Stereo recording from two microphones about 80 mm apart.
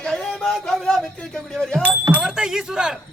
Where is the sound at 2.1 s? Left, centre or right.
Centre.